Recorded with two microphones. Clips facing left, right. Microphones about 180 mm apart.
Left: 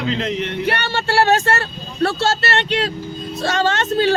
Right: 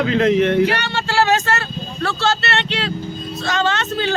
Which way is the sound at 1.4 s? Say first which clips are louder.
Left 1 dB; 30° left (ahead or behind).